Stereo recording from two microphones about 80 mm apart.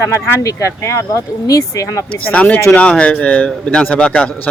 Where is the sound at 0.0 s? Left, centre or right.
Left.